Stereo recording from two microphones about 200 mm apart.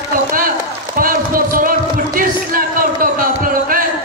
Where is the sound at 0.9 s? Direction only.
45° right (ahead or behind).